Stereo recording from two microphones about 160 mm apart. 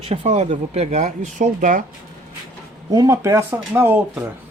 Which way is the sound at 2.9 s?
25° right (ahead or behind).